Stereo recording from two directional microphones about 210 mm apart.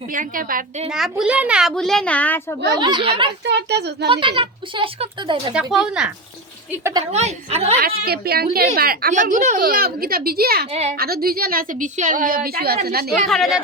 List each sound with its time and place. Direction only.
0.1 s a woman's voice: 40° right (ahead or behind)
0.9 s a child's voice: 5° right (ahead or behind)
2.7 s speech: 20° right (ahead or behind)
3.4 s speech: 50° right (ahead or behind)
4.1 s speech: 25° right (ahead or behind)
5.7 s a child's voice: 5° right (ahead or behind)
7.1 s a woman's voice: 30° right (ahead or behind)
7.8 s speech: 45° right (ahead or behind)
10.7 s a woman's voice: 30° right (ahead or behind)
10.9 s speech: 45° right (ahead or behind)
13.2 s a child's voice: centre (ahead or behind)